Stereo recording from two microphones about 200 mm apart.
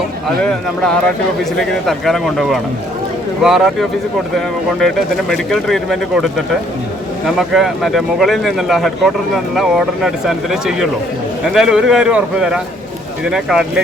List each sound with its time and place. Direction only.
0.4 s speech: 5° left (ahead or behind)